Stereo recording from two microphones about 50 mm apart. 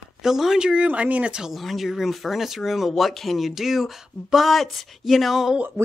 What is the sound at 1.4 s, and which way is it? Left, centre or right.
Speech, centre.